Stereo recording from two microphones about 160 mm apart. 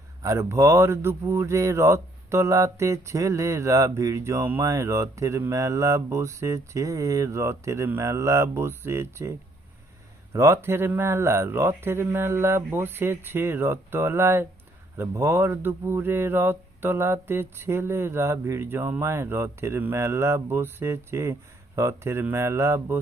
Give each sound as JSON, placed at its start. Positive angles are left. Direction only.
{"t": 0.2, "sound": "speech", "side_deg": -20}
{"t": 10.3, "sound": "speech", "side_deg": -15}